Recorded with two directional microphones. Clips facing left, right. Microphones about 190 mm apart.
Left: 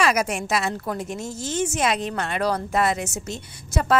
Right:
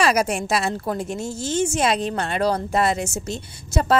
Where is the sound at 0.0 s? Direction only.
35° right (ahead or behind).